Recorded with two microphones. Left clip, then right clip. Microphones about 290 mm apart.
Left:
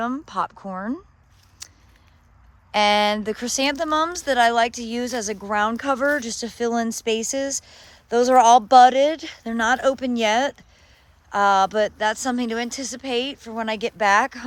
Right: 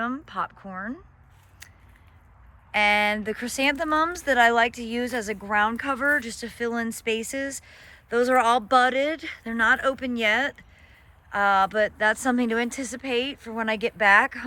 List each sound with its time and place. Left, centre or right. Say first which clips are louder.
0.0 s speech: left 4 dB; centre
1.6 s biting: left 6 dB; centre
2.7 s speech: left 3 dB; centre